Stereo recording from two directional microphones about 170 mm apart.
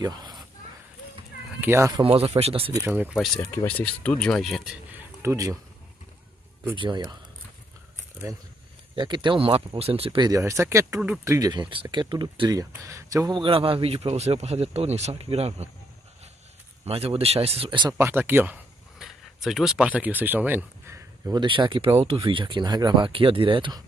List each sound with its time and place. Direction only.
0.0 s speech: 25° right (ahead or behind)
1.6 s speech: 15° right (ahead or behind)
2.1 s speech: 35° right (ahead or behind)
2.7 s speech: 10° right (ahead or behind)
3.8 s speech: 5° left (ahead or behind)
4.9 s a sound: 15° right (ahead or behind)
6.7 s speech: 30° right (ahead or behind)
8.9 s speech: 25° right (ahead or behind)
16.8 s speech: 35° right (ahead or behind)
17.9 s speech: 15° right (ahead or behind)
21.4 s speech: 30° right (ahead or behind)